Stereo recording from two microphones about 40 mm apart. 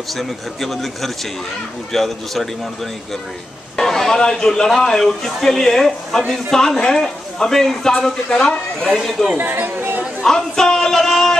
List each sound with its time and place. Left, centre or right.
0.1 s speech: centre
3.7 s a sound: centre
4.2 s speech: centre
4.5 s speech: centre
9.4 s speech: right
10.2 s a sound: centre